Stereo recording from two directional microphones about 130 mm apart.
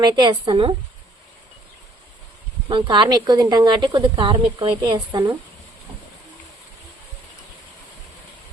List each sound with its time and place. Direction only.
0.0 s speech: 35° right (ahead or behind)
2.6 s speech: 40° right (ahead or behind)